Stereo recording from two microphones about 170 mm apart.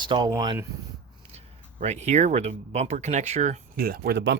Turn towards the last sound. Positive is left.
turn(degrees=-85)